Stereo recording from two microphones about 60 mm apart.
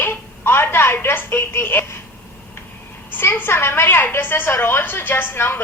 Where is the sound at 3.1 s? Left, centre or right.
Left.